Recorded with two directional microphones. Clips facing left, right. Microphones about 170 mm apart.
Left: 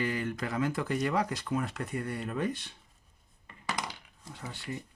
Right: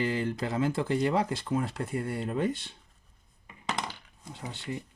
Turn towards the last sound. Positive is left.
turn(degrees=-25)  # may be behind; listen again after turning